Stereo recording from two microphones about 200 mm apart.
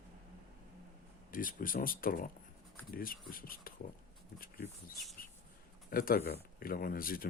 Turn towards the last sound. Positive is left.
turn(degrees=45)  # may be behind; listen again after turning